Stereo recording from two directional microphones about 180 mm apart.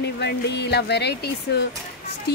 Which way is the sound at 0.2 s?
70° left (ahead or behind).